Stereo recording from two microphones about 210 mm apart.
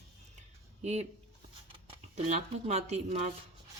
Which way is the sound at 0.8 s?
30° right (ahead or behind).